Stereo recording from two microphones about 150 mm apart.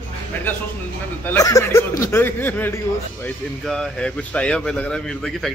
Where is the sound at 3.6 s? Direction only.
5° left (ahead or behind).